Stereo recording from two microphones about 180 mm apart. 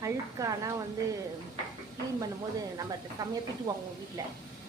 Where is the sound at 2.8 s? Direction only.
20° right (ahead or behind).